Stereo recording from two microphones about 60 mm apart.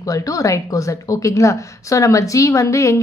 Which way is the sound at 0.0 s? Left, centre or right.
Left.